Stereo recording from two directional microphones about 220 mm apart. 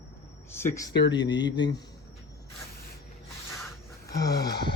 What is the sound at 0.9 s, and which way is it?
Speech, 50° left (ahead or behind).